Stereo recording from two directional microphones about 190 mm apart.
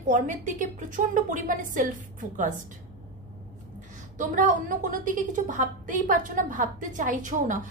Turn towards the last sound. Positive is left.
turn(degrees=-40)  # may be behind; listen again after turning